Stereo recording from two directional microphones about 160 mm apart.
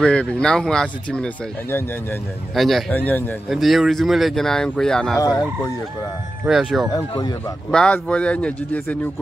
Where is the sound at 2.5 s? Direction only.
Centre (ahead or behind).